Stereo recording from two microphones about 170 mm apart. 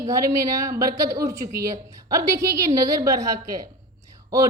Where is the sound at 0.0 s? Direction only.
20° right (ahead or behind).